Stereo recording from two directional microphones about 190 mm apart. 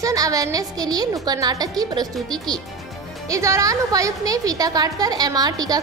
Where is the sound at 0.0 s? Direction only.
20° right (ahead or behind).